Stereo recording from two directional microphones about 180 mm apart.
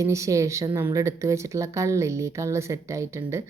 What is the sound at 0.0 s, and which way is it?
Speech, 15° right (ahead or behind).